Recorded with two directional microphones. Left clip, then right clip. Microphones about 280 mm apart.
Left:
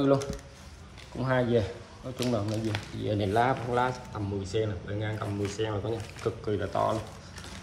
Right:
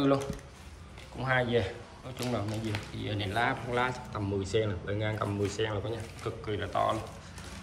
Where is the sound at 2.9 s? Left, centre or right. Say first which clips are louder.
Left 7 dB; centre.